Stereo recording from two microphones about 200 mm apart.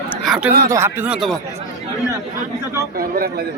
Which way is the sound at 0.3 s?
5° right (ahead or behind).